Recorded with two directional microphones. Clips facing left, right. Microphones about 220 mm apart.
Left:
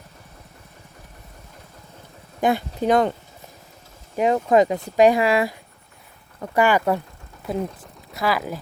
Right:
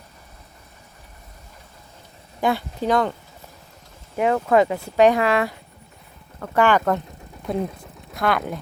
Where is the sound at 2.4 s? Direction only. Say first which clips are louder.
Left 2 dB; 20° left (ahead or behind).